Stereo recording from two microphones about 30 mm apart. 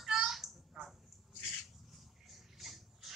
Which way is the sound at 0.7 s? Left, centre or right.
Centre.